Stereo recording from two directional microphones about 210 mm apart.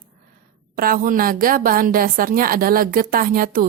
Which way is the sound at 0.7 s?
45° right (ahead or behind).